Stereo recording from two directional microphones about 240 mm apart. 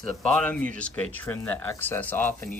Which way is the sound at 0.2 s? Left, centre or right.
Centre.